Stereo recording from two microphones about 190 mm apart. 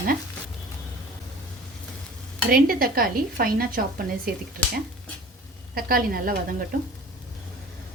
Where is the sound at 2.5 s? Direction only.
50° right (ahead or behind).